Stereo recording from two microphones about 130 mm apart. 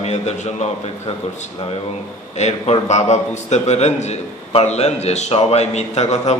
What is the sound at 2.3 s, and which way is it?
A man's voice, 55° left (ahead or behind).